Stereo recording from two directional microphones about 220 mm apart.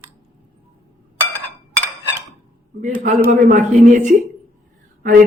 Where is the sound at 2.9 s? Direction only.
30° right (ahead or behind).